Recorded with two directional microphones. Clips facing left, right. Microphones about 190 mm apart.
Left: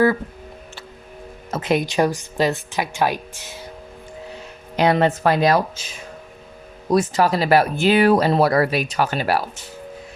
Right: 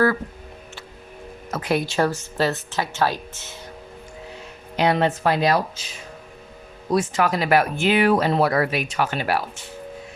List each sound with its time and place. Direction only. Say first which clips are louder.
1.5 s speech: left 3 dB; 25° left (ahead or behind)
4.8 s speech: left 3 dB; 45° left (ahead or behind)
6.9 s speech: left 3 dB; 40° left (ahead or behind)